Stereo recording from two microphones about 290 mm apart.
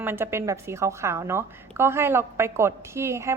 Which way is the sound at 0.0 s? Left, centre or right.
Centre.